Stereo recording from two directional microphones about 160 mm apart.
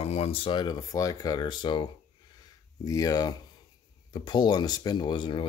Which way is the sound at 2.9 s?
25° left (ahead or behind).